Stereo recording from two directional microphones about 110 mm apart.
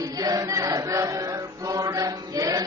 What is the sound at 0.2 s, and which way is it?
Chant, 35° right (ahead or behind).